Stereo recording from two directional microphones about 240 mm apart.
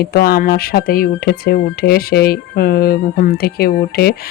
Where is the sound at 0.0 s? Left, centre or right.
Left.